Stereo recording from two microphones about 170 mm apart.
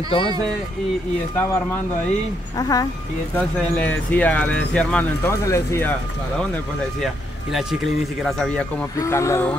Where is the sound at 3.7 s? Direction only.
10° left (ahead or behind).